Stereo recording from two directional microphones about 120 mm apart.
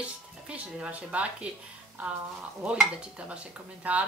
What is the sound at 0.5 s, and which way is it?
Speech, 10° right (ahead or behind).